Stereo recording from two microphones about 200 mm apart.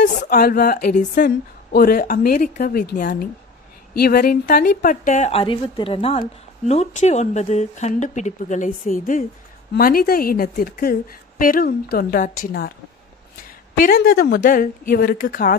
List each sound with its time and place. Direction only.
0.0 s a woman's voice: 50° left (ahead or behind)
13.7 s a woman's voice: 45° left (ahead or behind)